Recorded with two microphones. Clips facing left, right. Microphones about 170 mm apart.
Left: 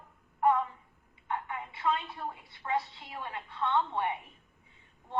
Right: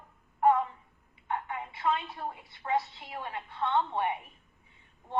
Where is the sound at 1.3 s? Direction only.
25° right (ahead or behind).